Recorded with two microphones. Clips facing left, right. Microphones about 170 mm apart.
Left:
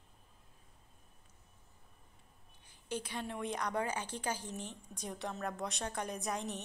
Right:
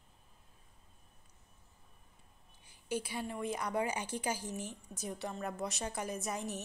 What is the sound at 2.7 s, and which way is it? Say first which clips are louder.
A woman's voice: right 3 dB; 10° right (ahead or behind).